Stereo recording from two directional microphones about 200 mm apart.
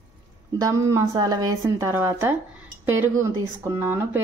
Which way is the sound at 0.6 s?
15° right (ahead or behind).